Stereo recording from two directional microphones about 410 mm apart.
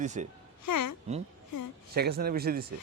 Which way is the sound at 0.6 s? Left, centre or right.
Left.